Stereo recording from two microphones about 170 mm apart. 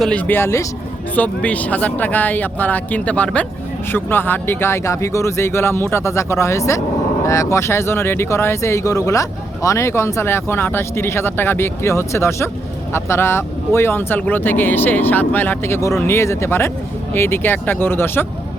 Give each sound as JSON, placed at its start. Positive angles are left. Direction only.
{"t": 0.0, "sound": "speech", "side_deg": 10}